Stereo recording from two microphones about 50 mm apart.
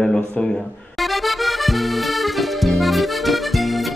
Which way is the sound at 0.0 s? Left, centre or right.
Centre.